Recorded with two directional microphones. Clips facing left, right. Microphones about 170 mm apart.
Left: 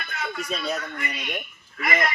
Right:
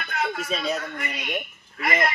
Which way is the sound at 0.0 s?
55° right (ahead or behind).